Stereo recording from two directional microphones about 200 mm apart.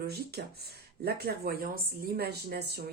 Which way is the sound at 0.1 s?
50° right (ahead or behind).